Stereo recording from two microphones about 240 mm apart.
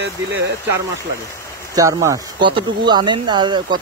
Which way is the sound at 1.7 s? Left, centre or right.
Centre.